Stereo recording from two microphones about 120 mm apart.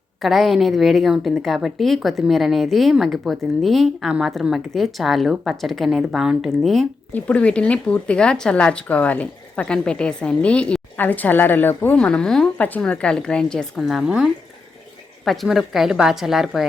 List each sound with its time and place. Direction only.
0.2 s a woman's voice: centre (ahead or behind)
7.1 s a woman's voice: 10° left (ahead or behind)